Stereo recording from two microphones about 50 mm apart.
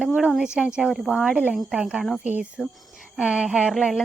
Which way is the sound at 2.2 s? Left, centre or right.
Right.